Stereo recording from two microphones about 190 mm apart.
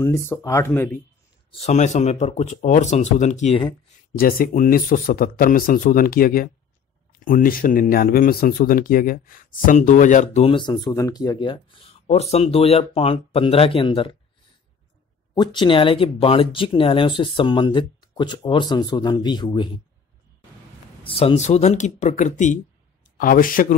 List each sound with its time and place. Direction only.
0.0 s speech: 15° left (ahead or behind)
1.5 s speech: 35° left (ahead or behind)
4.2 s speech: 50° left (ahead or behind); by 14.1 s 30° left (ahead or behind)
15.3 s speech: 25° left (ahead or behind)
21.0 s speech: 30° left (ahead or behind); by 23.8 s 45° left (ahead or behind)